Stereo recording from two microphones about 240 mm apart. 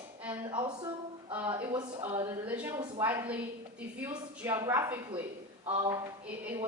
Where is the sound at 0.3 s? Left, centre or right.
Centre.